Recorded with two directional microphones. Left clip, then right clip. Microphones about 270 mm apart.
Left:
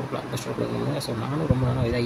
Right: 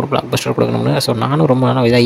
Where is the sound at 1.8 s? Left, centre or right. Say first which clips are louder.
Right 16 dB; right.